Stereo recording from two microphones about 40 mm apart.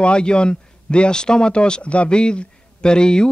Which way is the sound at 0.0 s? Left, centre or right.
Left.